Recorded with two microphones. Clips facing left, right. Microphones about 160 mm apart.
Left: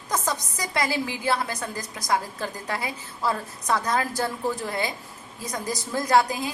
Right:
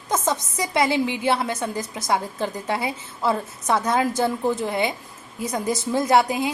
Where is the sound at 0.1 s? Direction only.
25° right (ahead or behind).